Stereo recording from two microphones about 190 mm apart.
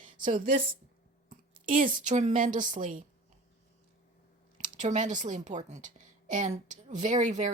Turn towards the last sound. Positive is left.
turn(degrees=-40)  # may be behind; listen again after turning